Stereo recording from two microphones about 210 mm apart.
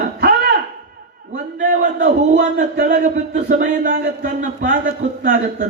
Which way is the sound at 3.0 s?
35° right (ahead or behind).